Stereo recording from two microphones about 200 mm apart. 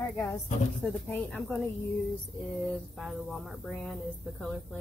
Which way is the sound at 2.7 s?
Centre (ahead or behind).